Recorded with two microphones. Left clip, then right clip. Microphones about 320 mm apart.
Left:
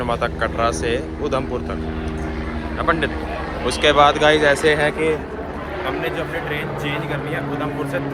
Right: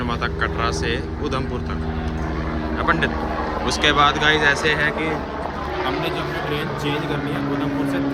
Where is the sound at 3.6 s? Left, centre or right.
Centre.